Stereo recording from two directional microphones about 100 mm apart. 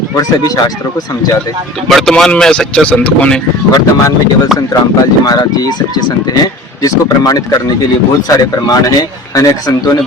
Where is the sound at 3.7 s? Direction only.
35° left (ahead or behind).